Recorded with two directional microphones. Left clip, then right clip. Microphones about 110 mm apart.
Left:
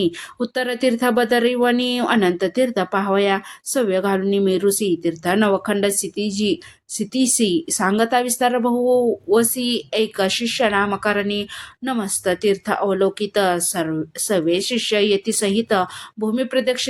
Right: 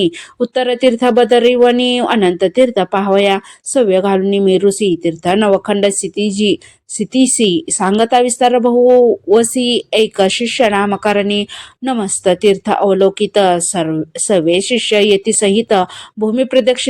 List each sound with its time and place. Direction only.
0.0 s a woman's voice: 25° right (ahead or behind)